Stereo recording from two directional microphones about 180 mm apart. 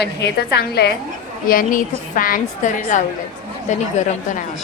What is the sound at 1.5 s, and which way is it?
A woman's voice, 50° left (ahead or behind).